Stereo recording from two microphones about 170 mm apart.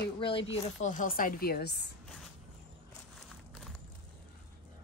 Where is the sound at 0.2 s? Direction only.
30° left (ahead or behind).